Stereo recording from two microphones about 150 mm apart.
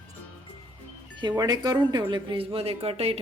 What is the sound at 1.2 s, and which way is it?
Speech, 30° right (ahead or behind).